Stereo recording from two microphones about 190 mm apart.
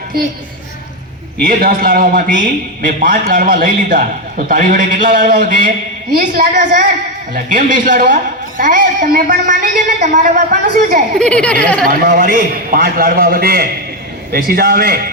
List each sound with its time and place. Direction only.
1.5 s a man's voice: 50° right (ahead or behind)
11.2 s speech: 5° left (ahead or behind)
11.9 s a man's voice: 45° right (ahead or behind)